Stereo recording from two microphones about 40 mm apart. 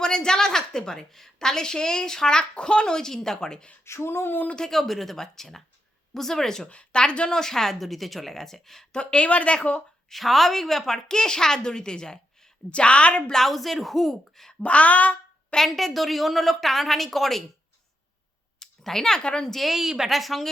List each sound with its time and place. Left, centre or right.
0.0 s a woman's voice: centre
4.0 s a sound: left
4.5 s a woman's voice: centre
6.7 s a woman's voice: left
7.3 s a woman's voice: centre
8.9 s speech: left
10.1 s a woman's voice: centre; by 13.3 s left
13.3 s a woman's voice: centre
14.6 s speech: left
15.5 s a woman's voice: centre
18.6 s speech: centre
19.5 s a woman's voice: centre
19.7 s speech: centre
20.1 s a woman's voice: centre